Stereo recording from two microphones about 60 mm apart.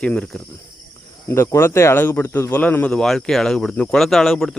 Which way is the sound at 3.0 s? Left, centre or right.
Centre.